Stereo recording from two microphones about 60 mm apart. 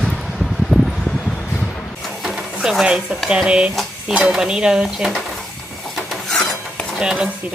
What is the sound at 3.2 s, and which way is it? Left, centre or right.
Dishes, centre.